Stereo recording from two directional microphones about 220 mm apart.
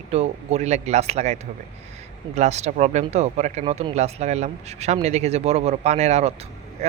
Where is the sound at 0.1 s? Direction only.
30° right (ahead or behind).